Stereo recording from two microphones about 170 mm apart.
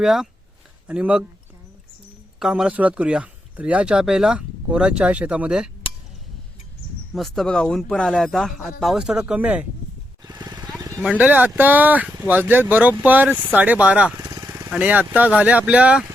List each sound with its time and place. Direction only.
0.0 s speech: centre (ahead or behind)
2.4 s speech: 5° right (ahead or behind)
7.1 s speech: centre (ahead or behind)
10.2 s vehicle: 25° right (ahead or behind)
10.8 s a sound: 20° right (ahead or behind)
11.2 s speech: 10° right (ahead or behind)
14.2 s vehicle: 20° right (ahead or behind)
14.7 s speech: 10° right (ahead or behind)